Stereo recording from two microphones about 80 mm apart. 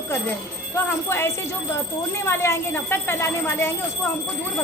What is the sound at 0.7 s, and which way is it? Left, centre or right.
Speech, left.